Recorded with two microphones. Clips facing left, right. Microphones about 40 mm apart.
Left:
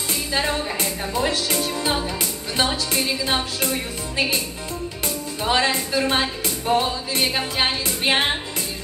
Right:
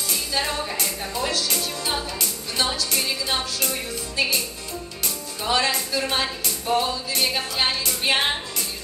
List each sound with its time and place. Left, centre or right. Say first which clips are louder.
0.1 s music: left 3 dB; left
5.0 s music: left 3 dB; left